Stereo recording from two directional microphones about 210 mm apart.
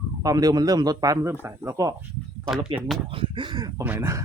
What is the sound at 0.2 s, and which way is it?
Speech, 15° right (ahead or behind).